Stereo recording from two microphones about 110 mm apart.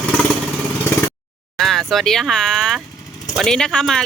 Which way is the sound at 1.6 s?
Centre (ahead or behind).